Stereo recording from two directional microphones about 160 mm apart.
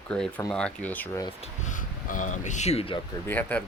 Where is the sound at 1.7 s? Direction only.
55° left (ahead or behind); by 3.0 s 35° left (ahead or behind).